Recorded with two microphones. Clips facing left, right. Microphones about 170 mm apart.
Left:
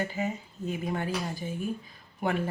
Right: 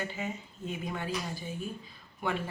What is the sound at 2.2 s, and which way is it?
Speech, 45° left (ahead or behind).